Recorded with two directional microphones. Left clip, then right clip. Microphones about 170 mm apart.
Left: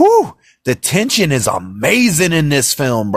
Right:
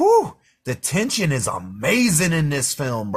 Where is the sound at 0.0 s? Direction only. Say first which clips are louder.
Left 6 dB; 50° left (ahead or behind).